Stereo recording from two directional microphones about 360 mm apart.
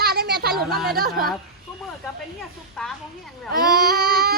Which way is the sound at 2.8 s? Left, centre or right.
Centre.